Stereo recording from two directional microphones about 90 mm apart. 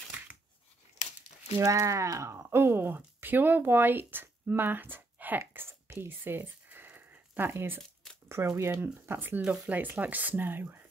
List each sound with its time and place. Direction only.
1.6 s speech: 35° right (ahead or behind)
5.4 s a sound: 25° right (ahead or behind)
8.3 s speech: 30° right (ahead or behind)